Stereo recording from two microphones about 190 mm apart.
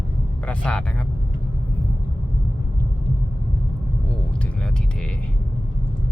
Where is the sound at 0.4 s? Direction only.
5° left (ahead or behind).